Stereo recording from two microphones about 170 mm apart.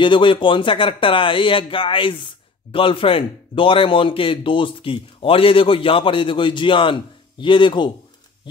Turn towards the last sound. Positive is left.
turn(degrees=30)  # may be behind; listen again after turning